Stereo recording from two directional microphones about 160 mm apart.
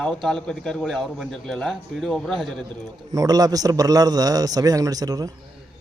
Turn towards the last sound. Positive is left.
turn(degrees=-25)  # may be behind; listen again after turning